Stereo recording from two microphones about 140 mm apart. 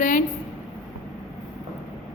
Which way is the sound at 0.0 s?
70° left (ahead or behind).